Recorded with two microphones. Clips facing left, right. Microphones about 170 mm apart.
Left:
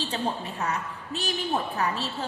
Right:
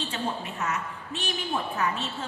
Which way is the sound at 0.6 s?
35° left (ahead or behind).